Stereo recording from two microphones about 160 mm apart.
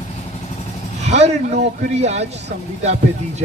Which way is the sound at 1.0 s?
45° right (ahead or behind).